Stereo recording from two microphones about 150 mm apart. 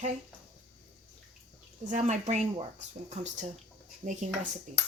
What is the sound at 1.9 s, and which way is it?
Speech, 55° right (ahead or behind).